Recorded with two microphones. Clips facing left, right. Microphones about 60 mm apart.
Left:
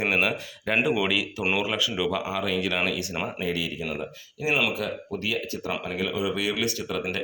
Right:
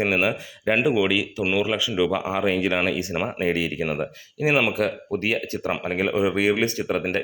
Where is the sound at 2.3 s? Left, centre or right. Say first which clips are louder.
Right 5 dB; right.